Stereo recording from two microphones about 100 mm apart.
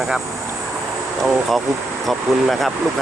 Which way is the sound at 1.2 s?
Centre (ahead or behind).